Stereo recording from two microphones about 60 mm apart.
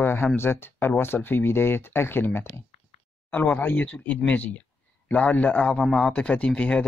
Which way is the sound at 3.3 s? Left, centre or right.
Left.